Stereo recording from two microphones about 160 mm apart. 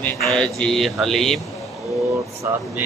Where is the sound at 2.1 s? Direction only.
20° right (ahead or behind).